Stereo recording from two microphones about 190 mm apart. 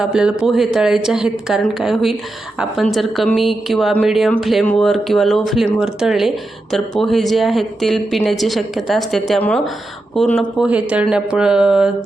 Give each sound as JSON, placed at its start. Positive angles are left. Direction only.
{"t": 0.0, "sound": "a woman's voice", "side_deg": -5}